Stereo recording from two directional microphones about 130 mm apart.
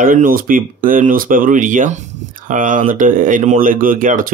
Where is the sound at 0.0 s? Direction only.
90° right.